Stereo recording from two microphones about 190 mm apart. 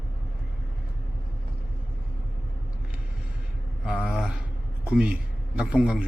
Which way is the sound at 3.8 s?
5° right (ahead or behind).